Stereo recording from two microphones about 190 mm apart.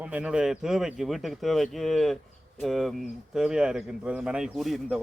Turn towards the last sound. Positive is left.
turn(degrees=0)  # may be behind; listen again after turning